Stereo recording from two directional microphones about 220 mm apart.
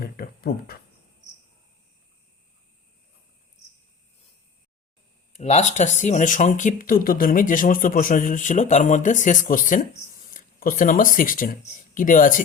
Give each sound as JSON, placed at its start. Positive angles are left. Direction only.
{"t": 0.0, "sound": "speech", "side_deg": 45}
{"t": 5.3, "sound": "speech", "side_deg": 30}